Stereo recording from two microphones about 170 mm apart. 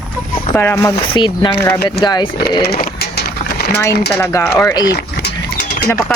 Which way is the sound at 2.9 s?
70° left (ahead or behind).